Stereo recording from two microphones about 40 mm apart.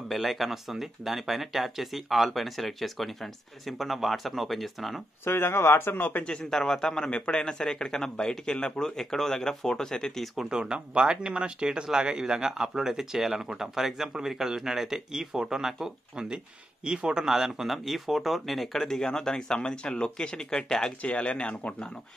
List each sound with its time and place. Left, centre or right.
0.1 s speech: centre
5.2 s speech: left
6.2 s a man's voice: left
10.2 s speech: centre
10.5 s speech: centre
17.2 s speech: centre
21.0 s speech: left